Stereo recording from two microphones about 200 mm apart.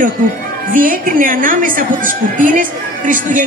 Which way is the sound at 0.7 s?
45° right (ahead or behind).